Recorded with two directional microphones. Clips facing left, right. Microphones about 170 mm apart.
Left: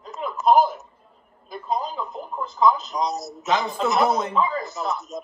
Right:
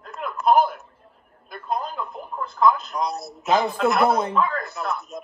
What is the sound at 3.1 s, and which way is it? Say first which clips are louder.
Speech: right 2 dB; 60° right (ahead or behind).